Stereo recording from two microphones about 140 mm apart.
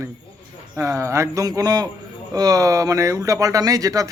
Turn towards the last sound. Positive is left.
turn(degrees=-25)  # may be behind; listen again after turning